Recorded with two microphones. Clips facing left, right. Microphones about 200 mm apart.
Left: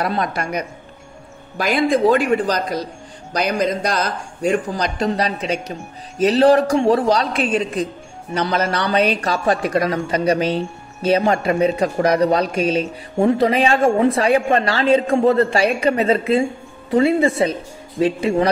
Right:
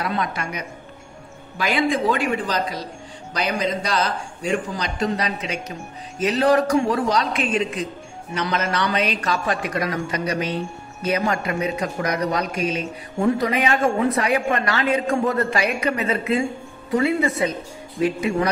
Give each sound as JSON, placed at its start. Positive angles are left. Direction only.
{"t": 0.0, "sound": "a man's voice", "side_deg": 40}
{"t": 4.9, "sound": "speech", "side_deg": 35}